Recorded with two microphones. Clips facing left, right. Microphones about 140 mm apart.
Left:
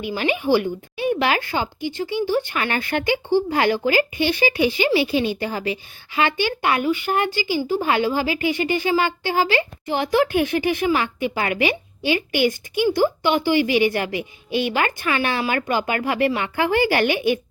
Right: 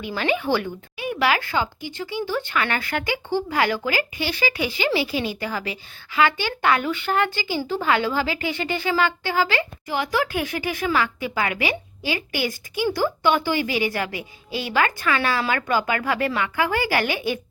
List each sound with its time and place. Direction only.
0.0 s speech: 15° left (ahead or behind)
0.9 s speech: 30° left (ahead or behind)